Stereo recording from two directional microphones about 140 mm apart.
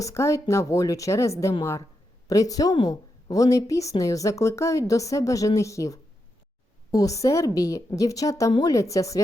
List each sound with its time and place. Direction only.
0.0 s a woman's voice: 20° left (ahead or behind)